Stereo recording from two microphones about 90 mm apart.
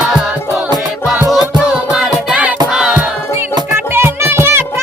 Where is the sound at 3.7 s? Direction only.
25° right (ahead or behind).